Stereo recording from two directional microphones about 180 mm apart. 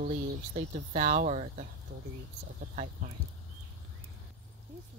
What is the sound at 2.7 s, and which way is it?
Speech, 45° right (ahead or behind).